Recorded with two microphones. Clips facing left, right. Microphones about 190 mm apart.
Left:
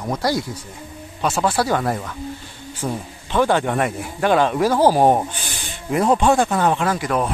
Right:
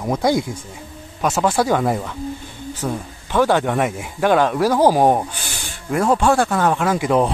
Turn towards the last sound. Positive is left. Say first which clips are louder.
# right 3 dB
turn(degrees=-10)  # may be behind; listen again after turning